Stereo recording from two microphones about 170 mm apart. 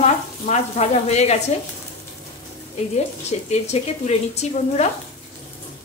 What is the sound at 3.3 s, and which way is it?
Speech, 40° left (ahead or behind).